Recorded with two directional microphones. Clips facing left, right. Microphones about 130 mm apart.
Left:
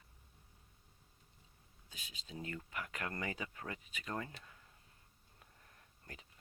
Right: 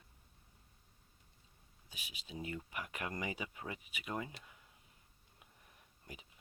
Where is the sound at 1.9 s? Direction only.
15° right (ahead or behind).